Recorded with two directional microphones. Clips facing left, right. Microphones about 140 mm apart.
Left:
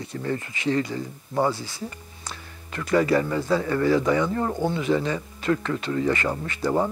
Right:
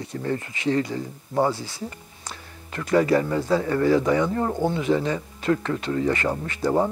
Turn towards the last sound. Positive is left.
turn(degrees=-30)  # may be behind; listen again after turning